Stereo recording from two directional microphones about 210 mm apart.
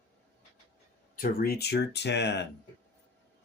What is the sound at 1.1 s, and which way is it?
Speech, 45° left (ahead or behind).